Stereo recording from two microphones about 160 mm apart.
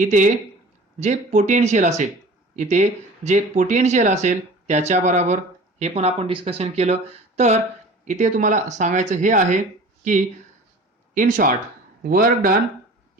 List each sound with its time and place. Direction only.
0.0 s speech: 50° right (ahead or behind)